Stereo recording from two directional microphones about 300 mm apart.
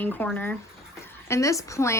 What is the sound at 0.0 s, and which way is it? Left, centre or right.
Speech, centre.